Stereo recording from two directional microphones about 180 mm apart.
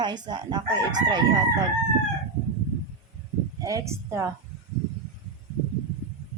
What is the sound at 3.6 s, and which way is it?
Speech, 15° right (ahead or behind).